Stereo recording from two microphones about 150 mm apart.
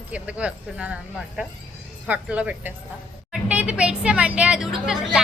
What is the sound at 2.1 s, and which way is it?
Speech, 10° right (ahead or behind).